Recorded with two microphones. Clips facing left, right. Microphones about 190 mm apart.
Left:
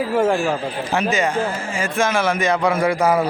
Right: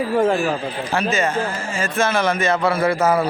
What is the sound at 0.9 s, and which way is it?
A man's voice, 15° left (ahead or behind).